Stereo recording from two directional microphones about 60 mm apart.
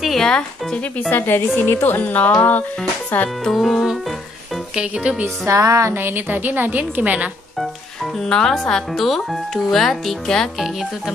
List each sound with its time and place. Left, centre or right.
0.0 s speech: centre
1.1 s a woman's voice: left
3.4 s speech: centre
4.7 s speech: centre
5.5 s music: right
5.9 s a woman's voice: right
8.3 s speech: centre